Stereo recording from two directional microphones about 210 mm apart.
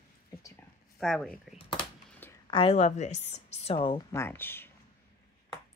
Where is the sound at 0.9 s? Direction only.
Centre (ahead or behind).